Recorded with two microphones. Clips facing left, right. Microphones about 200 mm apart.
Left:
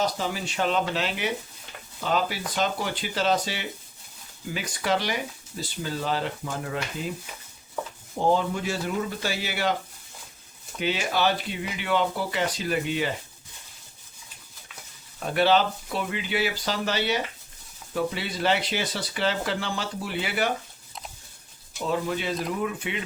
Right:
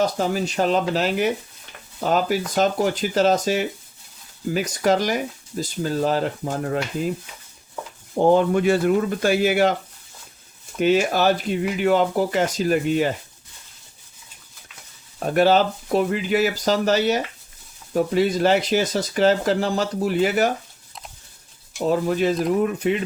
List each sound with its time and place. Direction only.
0.0 s speech: 45° right (ahead or behind)
8.2 s speech: 55° right (ahead or behind)
10.8 s speech: 45° right (ahead or behind)
15.2 s speech: 45° right (ahead or behind)
21.8 s speech: 40° right (ahead or behind)